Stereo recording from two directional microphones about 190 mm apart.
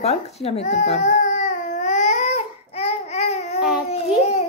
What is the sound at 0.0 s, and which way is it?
Baby cry, 35° left (ahead or behind).